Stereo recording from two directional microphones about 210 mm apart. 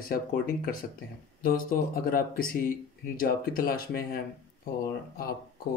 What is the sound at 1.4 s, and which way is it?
Speech, 45° left (ahead or behind).